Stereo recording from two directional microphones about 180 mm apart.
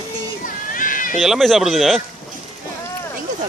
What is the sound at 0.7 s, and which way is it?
Cat, 50° left (ahead or behind).